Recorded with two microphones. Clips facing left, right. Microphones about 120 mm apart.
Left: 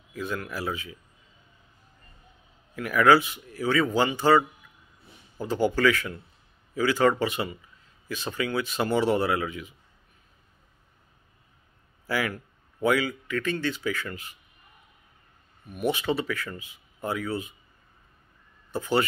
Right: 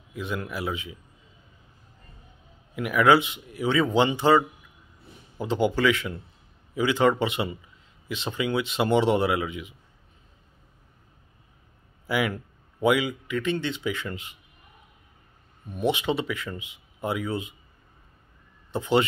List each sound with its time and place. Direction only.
0.1 s speech: 20° right (ahead or behind)
2.7 s speech: 15° right (ahead or behind)
5.4 s a man's voice: 15° right (ahead or behind)
12.1 s a man's voice: 15° right (ahead or behind)
15.7 s speech: 20° right (ahead or behind)
18.7 s speech: 20° right (ahead or behind)